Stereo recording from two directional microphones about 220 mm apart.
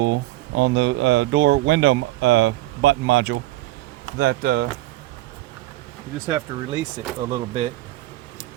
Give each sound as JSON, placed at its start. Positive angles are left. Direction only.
{"t": 0.0, "sound": "speech", "side_deg": -55}
{"t": 6.2, "sound": "speech", "side_deg": -15}
{"t": 7.3, "sound": "speech", "side_deg": -30}